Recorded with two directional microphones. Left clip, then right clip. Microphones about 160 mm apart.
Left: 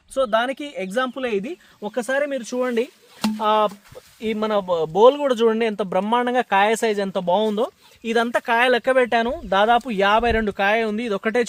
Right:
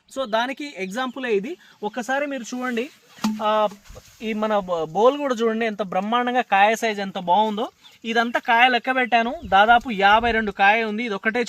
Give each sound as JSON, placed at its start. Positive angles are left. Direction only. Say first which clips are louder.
{"t": 0.1, "sound": "speech", "louder": "left 3 dB", "side_deg": 20}
{"t": 1.8, "sound": "speech", "louder": "left 2 dB", "side_deg": 45}
{"t": 3.3, "sound": "speech", "louder": "left 2 dB", "side_deg": 65}